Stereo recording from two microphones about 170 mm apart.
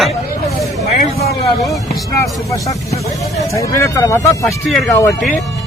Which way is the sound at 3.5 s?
20° left (ahead or behind).